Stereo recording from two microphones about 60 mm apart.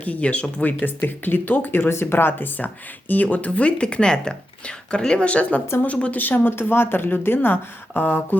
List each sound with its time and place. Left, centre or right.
0.0 s speech: left